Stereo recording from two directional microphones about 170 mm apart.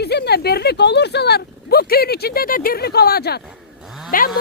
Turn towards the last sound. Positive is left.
turn(degrees=55)  # may be behind; listen again after turning